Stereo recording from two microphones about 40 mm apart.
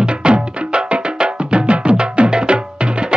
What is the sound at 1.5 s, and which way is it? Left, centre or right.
Music, right.